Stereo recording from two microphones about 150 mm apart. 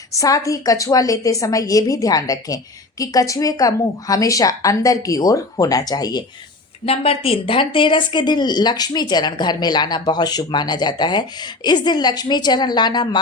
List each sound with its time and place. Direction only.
0.1 s speech: 20° left (ahead or behind)
6.8 s speech: 40° left (ahead or behind)